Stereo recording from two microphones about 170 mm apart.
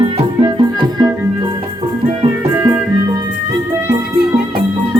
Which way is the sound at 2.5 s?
15° right (ahead or behind).